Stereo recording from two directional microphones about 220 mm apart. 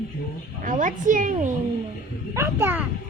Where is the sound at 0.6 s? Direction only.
35° right (ahead or behind).